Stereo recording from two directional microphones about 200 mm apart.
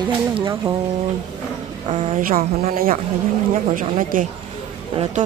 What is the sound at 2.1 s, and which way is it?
A woman's voice, 45° right (ahead or behind).